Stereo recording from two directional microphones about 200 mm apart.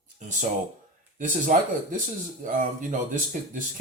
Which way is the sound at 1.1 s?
40° right (ahead or behind).